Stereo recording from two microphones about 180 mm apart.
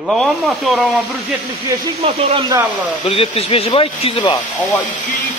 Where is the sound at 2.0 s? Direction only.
35° right (ahead or behind).